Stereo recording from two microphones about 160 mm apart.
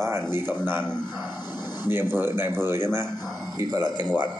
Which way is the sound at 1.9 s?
15° right (ahead or behind).